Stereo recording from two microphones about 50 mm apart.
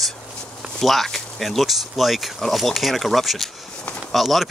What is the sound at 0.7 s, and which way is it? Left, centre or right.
Speech, centre.